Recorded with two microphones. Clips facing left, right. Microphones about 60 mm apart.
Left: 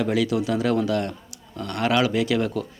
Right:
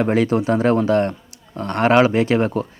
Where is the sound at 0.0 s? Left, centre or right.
Right.